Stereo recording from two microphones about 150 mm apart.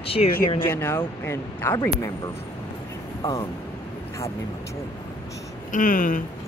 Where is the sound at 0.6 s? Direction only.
15° left (ahead or behind).